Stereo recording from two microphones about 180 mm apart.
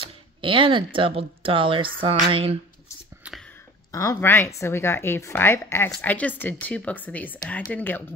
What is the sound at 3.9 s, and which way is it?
A woman's voice, 20° left (ahead or behind).